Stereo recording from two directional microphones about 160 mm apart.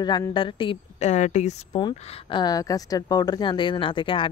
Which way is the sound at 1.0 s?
45° left (ahead or behind).